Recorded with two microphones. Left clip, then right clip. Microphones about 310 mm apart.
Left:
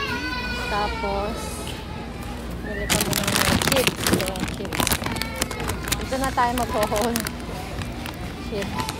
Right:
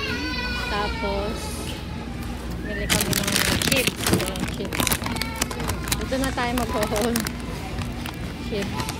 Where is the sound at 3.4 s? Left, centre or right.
Left.